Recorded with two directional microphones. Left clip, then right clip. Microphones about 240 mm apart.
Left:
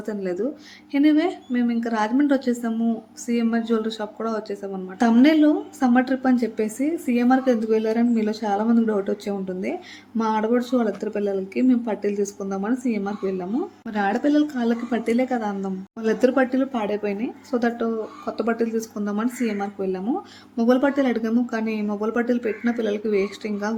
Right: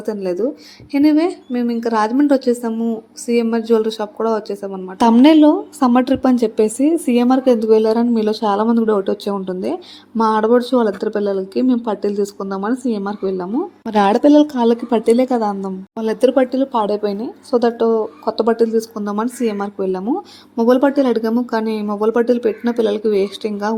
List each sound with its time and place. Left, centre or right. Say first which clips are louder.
0.0 s a woman's voice: right 7 dB; centre
4.9 s a woman's voice: right 7 dB; right
11.2 s speech: right 4 dB; centre
12.2 s a woman's voice: right 5 dB; centre
16.7 s speech: right 8 dB; centre
18.4 s a woman's voice: right 8 dB; centre